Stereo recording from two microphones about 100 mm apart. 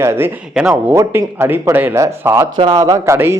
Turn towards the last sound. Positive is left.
turn(degrees=-25)  # may be behind; listen again after turning